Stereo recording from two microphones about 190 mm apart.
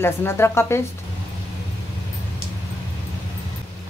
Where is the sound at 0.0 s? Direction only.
15° left (ahead or behind).